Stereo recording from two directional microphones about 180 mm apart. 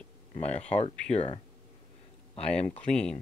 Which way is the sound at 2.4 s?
5° left (ahead or behind).